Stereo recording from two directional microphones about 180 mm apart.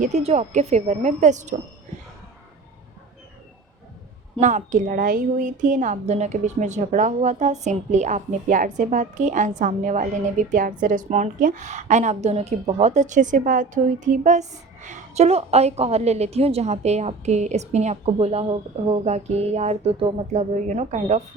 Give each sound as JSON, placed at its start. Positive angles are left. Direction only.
{"t": 0.0, "sound": "a woman's voice", "side_deg": -40}
{"t": 4.4, "sound": "a woman's voice", "side_deg": -45}